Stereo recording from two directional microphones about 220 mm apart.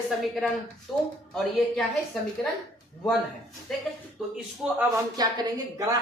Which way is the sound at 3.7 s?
Centre (ahead or behind).